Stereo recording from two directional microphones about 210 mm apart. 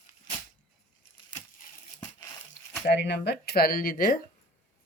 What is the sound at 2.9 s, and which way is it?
Speech, 55° left (ahead or behind).